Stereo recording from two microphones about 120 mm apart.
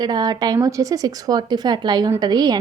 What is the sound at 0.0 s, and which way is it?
Speech, 35° right (ahead or behind).